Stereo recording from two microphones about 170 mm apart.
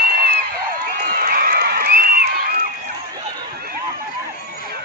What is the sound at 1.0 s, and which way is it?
Crowd, 55° right (ahead or behind).